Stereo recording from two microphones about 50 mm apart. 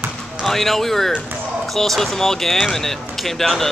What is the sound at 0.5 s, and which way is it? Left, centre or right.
Speech, centre.